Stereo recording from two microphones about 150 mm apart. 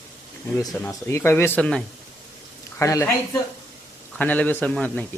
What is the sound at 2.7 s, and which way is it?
Speech, 20° left (ahead or behind).